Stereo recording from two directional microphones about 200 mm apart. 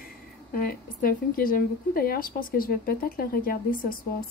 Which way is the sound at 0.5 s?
45° left (ahead or behind).